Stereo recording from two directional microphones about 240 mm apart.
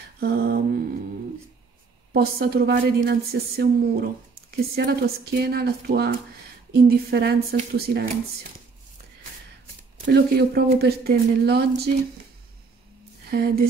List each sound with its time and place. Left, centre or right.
0.2 s mantra: right
2.1 s a woman's voice: right
10.0 s a woman's voice: right
13.3 s a woman's voice: right